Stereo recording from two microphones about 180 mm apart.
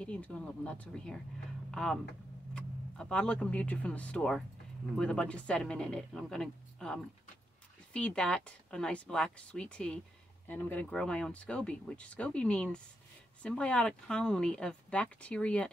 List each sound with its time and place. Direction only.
0.0 s speech: 5° left (ahead or behind)